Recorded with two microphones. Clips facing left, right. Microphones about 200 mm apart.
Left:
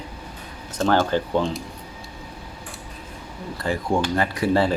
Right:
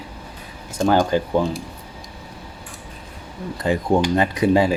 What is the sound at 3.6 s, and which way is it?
Speech, 20° right (ahead or behind).